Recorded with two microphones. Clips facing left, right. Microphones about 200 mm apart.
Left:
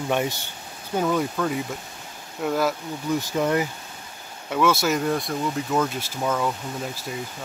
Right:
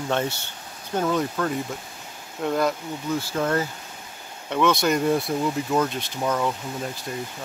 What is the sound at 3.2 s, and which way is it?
Speech, 15° left (ahead or behind).